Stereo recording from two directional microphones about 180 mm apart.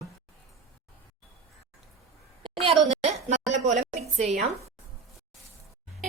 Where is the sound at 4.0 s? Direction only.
40° right (ahead or behind).